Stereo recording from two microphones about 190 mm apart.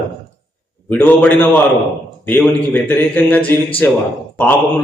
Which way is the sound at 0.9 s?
10° left (ahead or behind).